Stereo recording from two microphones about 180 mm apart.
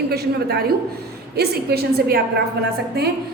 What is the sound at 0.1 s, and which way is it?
A woman's voice, 65° right (ahead or behind).